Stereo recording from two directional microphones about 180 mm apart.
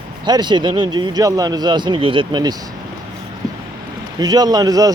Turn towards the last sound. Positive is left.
turn(degrees=-20)  # may be behind; listen again after turning